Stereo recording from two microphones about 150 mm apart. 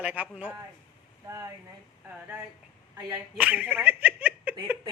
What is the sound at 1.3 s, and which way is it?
Speech, 20° right (ahead or behind).